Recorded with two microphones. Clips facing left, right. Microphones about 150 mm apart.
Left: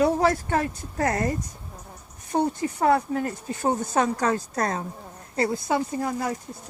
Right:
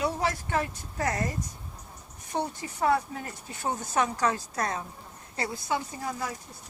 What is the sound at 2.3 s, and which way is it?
Speech, 50° left (ahead or behind).